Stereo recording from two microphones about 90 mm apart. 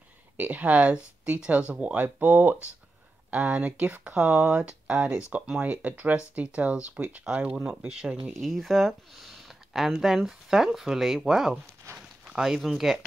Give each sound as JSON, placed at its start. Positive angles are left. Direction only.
{"t": 0.4, "sound": "speech", "side_deg": -15}
{"t": 8.3, "sound": "speech", "side_deg": 0}
{"t": 11.9, "sound": "a sound", "side_deg": -30}
{"t": 12.3, "sound": "speech", "side_deg": -5}